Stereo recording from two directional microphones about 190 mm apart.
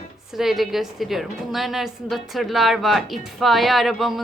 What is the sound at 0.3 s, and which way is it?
A woman's voice, centre (ahead or behind).